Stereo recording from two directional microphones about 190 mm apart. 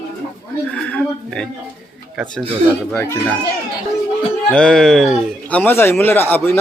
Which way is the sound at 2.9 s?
15° left (ahead or behind).